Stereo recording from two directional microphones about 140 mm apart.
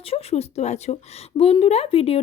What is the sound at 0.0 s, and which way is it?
Speech, 45° left (ahead or behind).